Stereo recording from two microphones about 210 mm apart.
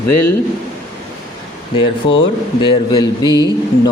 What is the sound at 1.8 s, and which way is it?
A man's voice, 25° left (ahead or behind).